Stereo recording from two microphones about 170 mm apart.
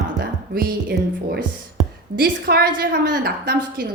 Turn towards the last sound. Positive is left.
turn(degrees=-60)  # may be behind; listen again after turning